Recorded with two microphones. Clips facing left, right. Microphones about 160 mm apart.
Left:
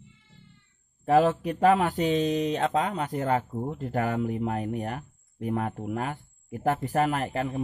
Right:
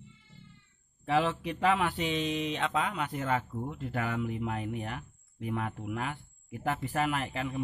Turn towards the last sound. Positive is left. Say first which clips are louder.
# left 5 dB
turn(degrees=40)  # may be behind; listen again after turning